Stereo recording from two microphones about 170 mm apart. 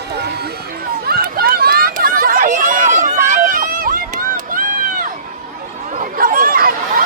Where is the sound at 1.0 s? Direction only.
60° right (ahead or behind).